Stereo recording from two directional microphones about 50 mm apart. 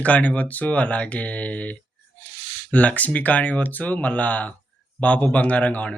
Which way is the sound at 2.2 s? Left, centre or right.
Left.